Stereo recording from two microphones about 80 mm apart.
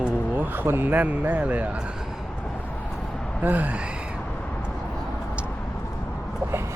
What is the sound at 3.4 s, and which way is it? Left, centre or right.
Speech, right.